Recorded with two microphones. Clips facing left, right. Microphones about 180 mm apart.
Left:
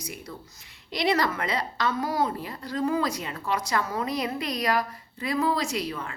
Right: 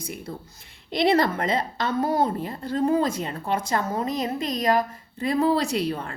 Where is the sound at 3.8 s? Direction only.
35° right (ahead or behind).